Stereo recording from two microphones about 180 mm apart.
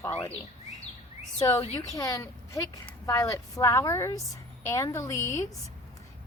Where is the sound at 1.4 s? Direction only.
15° left (ahead or behind).